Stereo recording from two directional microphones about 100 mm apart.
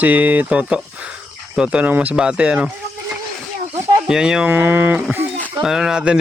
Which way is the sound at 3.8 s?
35° right (ahead or behind).